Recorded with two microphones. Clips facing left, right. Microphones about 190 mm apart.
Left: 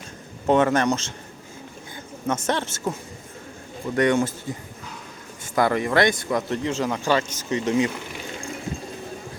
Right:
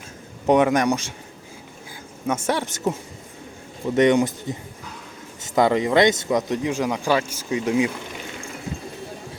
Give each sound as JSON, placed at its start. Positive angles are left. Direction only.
{"t": 0.4, "sound": "a man's voice", "side_deg": -15}
{"t": 2.2, "sound": "a man's voice", "side_deg": -10}
{"t": 3.9, "sound": "a man's voice", "side_deg": -20}